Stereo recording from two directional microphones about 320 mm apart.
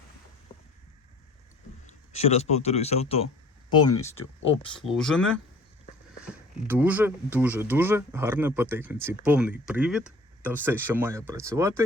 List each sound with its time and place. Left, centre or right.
0.5 s boat: centre
1.9 s speech: centre
4.7 s speech: centre